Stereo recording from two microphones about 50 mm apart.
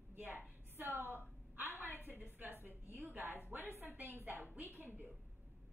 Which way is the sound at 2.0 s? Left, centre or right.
Right.